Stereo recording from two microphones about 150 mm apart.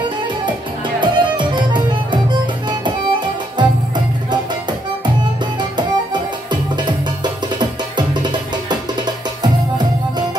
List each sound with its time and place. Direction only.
1.0 s music: 30° right (ahead or behind)
2.8 s music: 30° right (ahead or behind)
5.8 s music: 30° right (ahead or behind)
8.1 s music: 30° right (ahead or behind)